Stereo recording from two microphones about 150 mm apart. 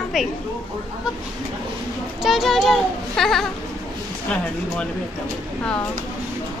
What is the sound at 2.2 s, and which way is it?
Speech, centre (ahead or behind).